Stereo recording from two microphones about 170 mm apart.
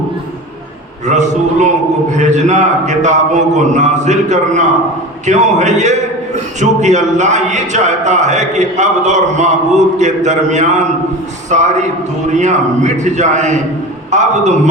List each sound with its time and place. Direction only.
1.0 s a man's voice: 45° right (ahead or behind)